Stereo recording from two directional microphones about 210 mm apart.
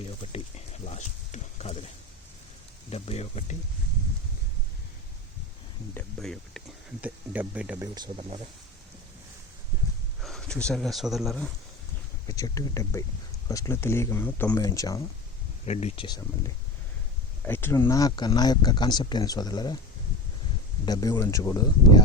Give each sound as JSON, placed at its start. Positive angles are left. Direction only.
{"t": 0.0, "sound": "a sound", "side_deg": 30}
{"t": 2.9, "sound": "a sound", "side_deg": 30}
{"t": 5.9, "sound": "a sound", "side_deg": 5}
{"t": 7.0, "sound": "speech", "side_deg": -5}
{"t": 7.9, "sound": "speech", "side_deg": -20}
{"t": 10.2, "sound": "speech", "side_deg": 0}
{"t": 12.3, "sound": "speech", "side_deg": 15}
{"t": 15.6, "sound": "speech", "side_deg": 30}
{"t": 20.8, "sound": "speech", "side_deg": 15}